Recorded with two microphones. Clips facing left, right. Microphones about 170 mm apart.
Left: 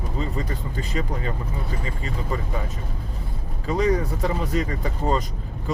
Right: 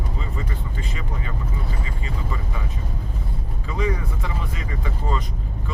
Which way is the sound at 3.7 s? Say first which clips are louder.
Left 5 dB; 40° left (ahead or behind).